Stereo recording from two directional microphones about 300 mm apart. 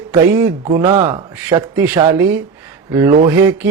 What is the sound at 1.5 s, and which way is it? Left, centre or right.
Speech, centre.